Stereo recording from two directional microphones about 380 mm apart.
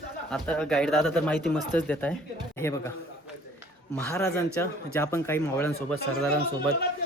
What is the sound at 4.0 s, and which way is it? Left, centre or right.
A man's voice, centre.